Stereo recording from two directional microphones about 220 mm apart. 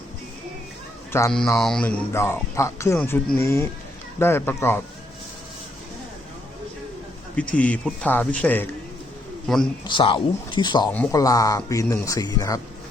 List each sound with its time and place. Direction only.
1.3 s speech: centre (ahead or behind)
7.5 s speech: 5° left (ahead or behind)
9.8 s speech: 20° left (ahead or behind)